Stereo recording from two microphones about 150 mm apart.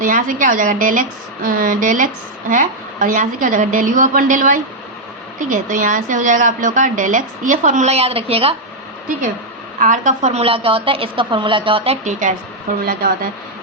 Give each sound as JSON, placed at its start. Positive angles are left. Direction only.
{"t": 0.0, "sound": "a woman's voice", "side_deg": -65}
{"t": 9.8, "sound": "a woman's voice", "side_deg": -55}
{"t": 12.8, "sound": "speech", "side_deg": -90}